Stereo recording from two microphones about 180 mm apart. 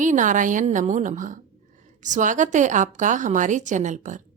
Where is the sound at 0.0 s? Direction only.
45° right (ahead or behind).